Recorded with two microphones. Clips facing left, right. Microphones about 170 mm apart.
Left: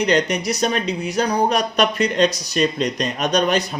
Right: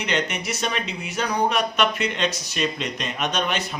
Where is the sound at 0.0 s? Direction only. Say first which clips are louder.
Left 7 dB; 40° left (ahead or behind).